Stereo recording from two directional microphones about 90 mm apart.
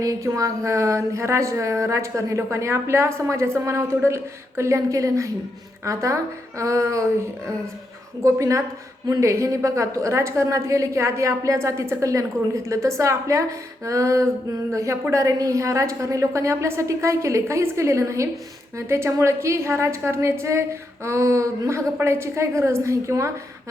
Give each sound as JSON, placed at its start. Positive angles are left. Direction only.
{"t": 0.0, "sound": "speech", "side_deg": -40}